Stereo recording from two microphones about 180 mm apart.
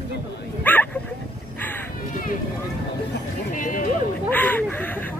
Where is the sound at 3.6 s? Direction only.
45° left (ahead or behind).